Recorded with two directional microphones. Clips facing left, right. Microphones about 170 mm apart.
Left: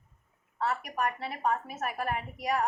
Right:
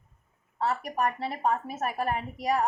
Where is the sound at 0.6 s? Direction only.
35° right (ahead or behind).